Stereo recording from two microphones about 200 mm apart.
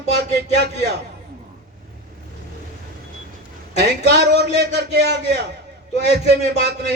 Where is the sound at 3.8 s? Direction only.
60° right (ahead or behind).